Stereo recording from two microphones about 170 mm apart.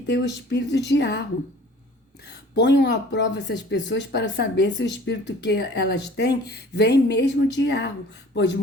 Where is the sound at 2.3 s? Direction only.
80° left.